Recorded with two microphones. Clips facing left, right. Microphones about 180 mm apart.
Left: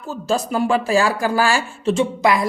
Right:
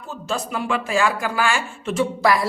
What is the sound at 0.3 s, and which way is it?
Speech, 40° left (ahead or behind).